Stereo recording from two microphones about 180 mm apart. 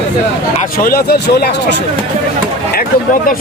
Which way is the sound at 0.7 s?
55° left (ahead or behind).